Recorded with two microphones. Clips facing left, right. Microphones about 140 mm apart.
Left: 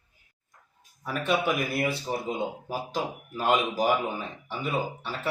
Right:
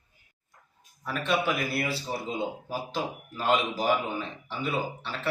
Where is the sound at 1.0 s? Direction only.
10° left (ahead or behind).